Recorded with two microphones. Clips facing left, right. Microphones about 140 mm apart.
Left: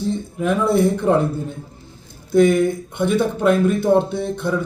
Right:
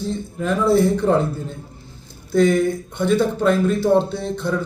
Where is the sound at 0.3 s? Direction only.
15° left (ahead or behind).